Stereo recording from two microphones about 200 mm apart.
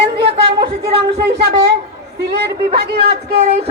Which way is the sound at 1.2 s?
55° right (ahead or behind).